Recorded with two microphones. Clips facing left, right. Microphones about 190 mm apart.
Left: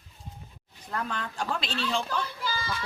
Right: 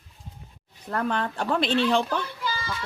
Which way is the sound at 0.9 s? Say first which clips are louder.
Right 7 dB; 55° right (ahead or behind).